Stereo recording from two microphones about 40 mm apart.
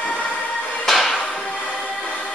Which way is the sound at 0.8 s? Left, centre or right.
Centre.